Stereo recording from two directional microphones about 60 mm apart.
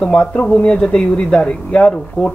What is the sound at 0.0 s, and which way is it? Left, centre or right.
Speech, centre.